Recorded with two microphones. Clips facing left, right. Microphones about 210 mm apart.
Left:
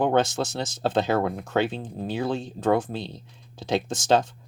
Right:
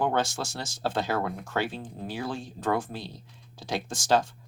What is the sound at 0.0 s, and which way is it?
Speech, 20° left (ahead or behind).